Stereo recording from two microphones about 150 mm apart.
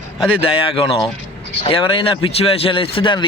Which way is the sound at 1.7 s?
35° left (ahead or behind).